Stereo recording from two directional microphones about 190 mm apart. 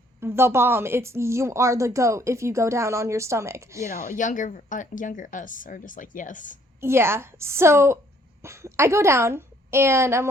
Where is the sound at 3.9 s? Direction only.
40° left (ahead or behind).